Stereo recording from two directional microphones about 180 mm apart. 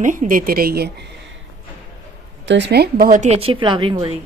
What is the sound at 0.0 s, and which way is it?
Speech, 45° right (ahead or behind).